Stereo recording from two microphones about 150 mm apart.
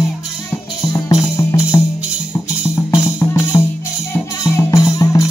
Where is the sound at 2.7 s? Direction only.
20° left (ahead or behind).